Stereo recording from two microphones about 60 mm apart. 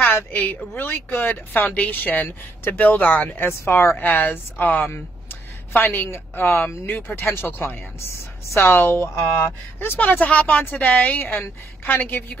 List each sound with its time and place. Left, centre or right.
0.1 s speech: left
4.2 s speech: left
5.7 s speech: left
8.5 s speech: left